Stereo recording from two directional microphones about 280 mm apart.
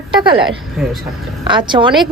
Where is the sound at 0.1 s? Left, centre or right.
Centre.